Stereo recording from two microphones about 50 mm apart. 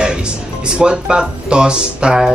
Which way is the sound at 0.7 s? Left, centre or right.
Centre.